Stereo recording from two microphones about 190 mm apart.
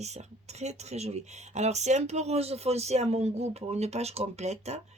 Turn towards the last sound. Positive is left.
turn(degrees=-35)  # may be behind; listen again after turning